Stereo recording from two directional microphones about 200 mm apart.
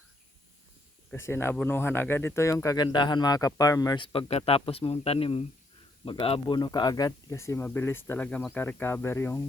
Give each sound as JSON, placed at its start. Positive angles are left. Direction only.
{"t": 1.1, "sound": "speech", "side_deg": 15}